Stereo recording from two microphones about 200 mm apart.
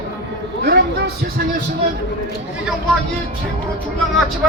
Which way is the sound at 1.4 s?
50° right (ahead or behind).